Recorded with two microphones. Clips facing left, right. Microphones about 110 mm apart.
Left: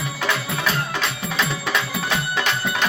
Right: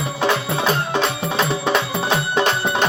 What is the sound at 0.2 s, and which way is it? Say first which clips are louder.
Music: right 6 dB; 30° right (ahead or behind).